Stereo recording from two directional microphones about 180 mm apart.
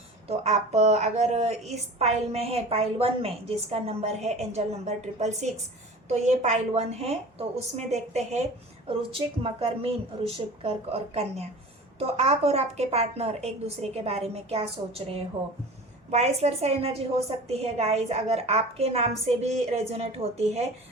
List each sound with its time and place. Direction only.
0.3 s a woman's voice: 35° right (ahead or behind)